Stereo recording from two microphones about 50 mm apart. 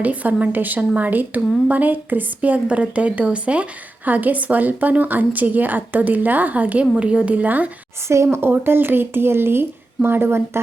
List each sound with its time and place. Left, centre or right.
0.0 s a woman's voice: right
8.0 s speech: right